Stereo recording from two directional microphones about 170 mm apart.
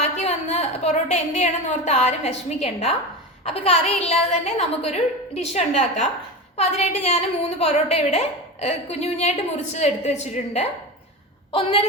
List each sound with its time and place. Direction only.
0.0 s a woman's voice: 40° left (ahead or behind)